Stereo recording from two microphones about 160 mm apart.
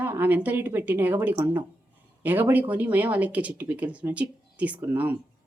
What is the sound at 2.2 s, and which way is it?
Speech, 10° right (ahead or behind).